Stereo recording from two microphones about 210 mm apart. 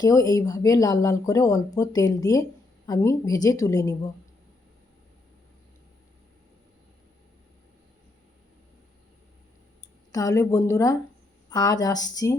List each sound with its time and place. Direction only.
0.0 s speech: 15° left (ahead or behind)
10.1 s speech: 15° left (ahead or behind)